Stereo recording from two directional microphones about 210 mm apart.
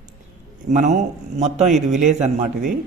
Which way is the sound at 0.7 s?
35° right (ahead or behind).